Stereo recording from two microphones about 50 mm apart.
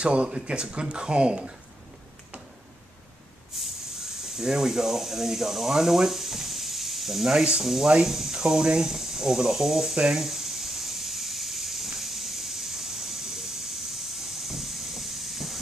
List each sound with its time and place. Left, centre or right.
0.0 s speech: right
3.5 s spray: centre
3.9 s speech: centre
7.6 s hiss: centre